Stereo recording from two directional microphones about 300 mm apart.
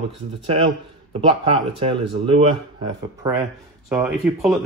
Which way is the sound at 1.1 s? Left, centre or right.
Centre.